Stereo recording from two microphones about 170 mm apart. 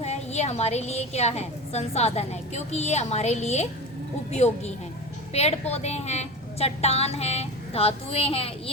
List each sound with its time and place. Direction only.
0.0 s a woman's voice: 40° left (ahead or behind)